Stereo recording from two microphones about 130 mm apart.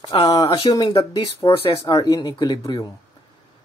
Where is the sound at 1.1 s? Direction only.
45° left (ahead or behind).